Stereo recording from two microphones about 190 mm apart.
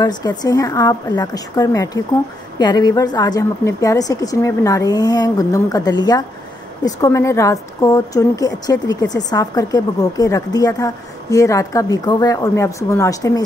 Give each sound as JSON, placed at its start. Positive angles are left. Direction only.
{"t": 0.0, "sound": "a woman's voice", "side_deg": 20}